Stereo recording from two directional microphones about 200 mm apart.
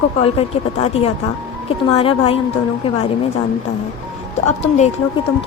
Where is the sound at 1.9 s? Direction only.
30° left (ahead or behind).